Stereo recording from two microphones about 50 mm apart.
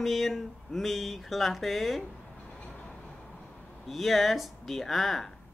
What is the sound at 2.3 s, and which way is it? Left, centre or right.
Vehicle, left.